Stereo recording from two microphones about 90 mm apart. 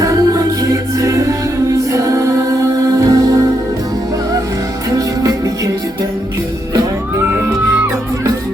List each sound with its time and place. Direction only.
0.0 s music: 40° right (ahead or behind)
4.9 s music: 40° right (ahead or behind)